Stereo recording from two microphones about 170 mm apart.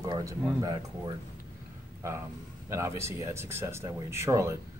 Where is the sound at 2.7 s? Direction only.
15° right (ahead or behind).